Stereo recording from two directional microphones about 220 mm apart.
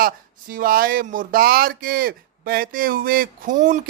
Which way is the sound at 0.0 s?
40° right (ahead or behind).